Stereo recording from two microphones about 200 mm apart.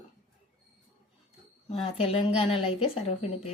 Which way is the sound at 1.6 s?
30° left (ahead or behind).